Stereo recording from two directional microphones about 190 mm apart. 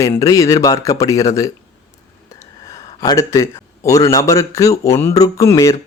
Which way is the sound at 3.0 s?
15° left (ahead or behind).